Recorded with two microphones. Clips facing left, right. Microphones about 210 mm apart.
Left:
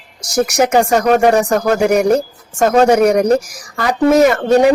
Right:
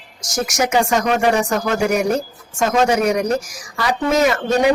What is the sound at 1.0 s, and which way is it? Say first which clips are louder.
Speech: left 5 dB; 45° left (ahead or behind).